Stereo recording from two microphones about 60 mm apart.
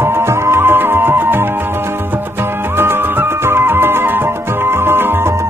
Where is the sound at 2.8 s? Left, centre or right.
Right.